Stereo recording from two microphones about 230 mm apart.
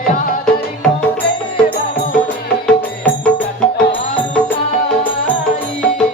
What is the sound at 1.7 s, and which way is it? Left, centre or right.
Music, left.